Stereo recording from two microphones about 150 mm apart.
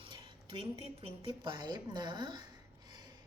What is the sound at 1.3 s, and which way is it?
A woman's voice, 30° right (ahead or behind).